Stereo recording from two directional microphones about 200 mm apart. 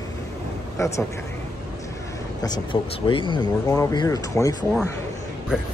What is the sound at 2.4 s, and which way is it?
Speech, 25° left (ahead or behind).